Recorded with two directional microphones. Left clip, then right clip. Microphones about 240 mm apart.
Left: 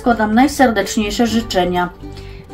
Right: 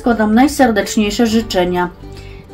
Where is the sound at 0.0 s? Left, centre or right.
Centre.